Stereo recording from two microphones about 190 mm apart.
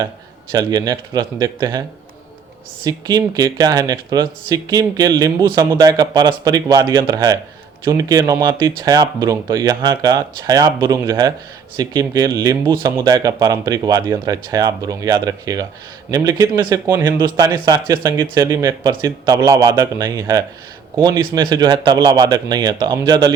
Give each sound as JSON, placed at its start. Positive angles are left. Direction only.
{"t": 0.5, "sound": "speech", "side_deg": -20}
{"t": 2.8, "sound": "speech", "side_deg": -20}